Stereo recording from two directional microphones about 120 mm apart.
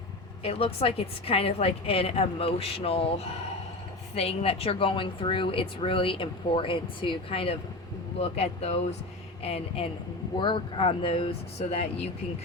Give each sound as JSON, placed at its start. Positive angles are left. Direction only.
{"t": 0.4, "sound": "a woman's voice", "side_deg": 55}
{"t": 8.2, "sound": "a woman's voice", "side_deg": 60}
{"t": 10.3, "sound": "a woman's voice", "side_deg": 40}